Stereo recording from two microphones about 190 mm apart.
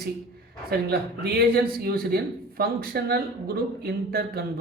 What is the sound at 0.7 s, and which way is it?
A man's voice, 55° right (ahead or behind).